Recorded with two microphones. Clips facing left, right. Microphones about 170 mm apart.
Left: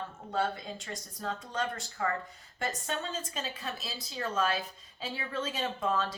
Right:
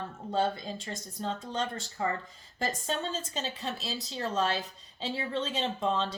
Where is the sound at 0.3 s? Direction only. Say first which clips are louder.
Right 3 dB; 25° right (ahead or behind).